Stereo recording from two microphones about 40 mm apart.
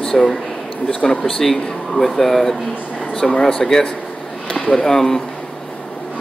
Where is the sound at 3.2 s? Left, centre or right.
Centre.